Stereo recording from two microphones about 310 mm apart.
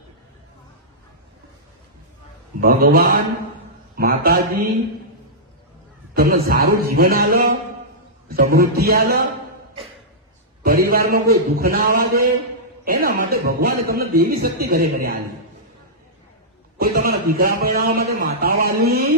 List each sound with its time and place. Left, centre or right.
2.6 s a man's voice: right
6.1 s a man's voice: right
10.6 s a man's voice: right
16.8 s a man's voice: right